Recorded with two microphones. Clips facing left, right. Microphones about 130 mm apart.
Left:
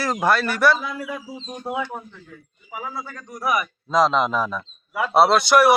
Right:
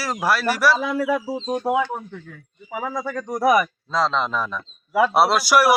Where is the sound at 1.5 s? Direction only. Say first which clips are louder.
Right 7 dB; 75° right (ahead or behind).